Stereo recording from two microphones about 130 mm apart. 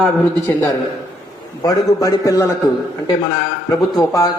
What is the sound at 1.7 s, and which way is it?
Speech, 25° left (ahead or behind).